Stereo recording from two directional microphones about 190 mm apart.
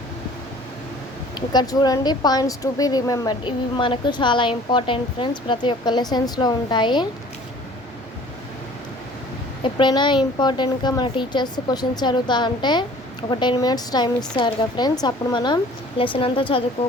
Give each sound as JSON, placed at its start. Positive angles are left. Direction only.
{"t": 1.4, "sound": "speech", "side_deg": 20}
{"t": 9.6, "sound": "speech", "side_deg": 25}